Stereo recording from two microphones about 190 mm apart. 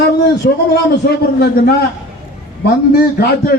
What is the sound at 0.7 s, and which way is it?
A man's voice, 60° left (ahead or behind).